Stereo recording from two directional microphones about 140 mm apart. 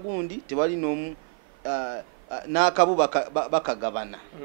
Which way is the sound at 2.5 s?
10° right (ahead or behind).